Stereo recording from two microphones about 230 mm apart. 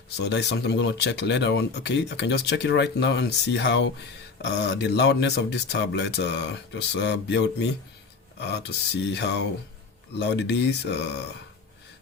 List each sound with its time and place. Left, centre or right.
0.2 s speech: left